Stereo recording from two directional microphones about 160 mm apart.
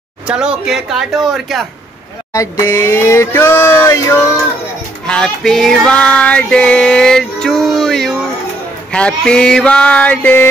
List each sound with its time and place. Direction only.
0.3 s music: 5° right (ahead or behind)
2.3 s speech: 20° left (ahead or behind)
5.0 s music: 5° left (ahead or behind)
8.9 s speech: 5° left (ahead or behind)